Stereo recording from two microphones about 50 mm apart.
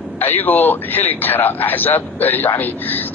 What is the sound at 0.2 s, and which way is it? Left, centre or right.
A man's voice, left.